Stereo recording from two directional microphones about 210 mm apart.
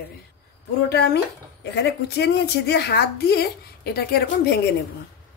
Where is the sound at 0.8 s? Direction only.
50° left (ahead or behind).